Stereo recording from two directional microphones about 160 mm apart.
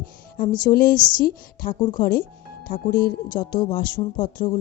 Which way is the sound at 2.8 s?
60° left (ahead or behind).